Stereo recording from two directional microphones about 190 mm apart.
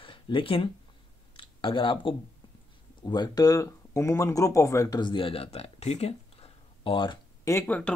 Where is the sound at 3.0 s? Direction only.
20° left (ahead or behind).